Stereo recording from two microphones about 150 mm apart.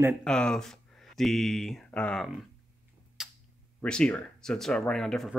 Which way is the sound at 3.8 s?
5° left (ahead or behind).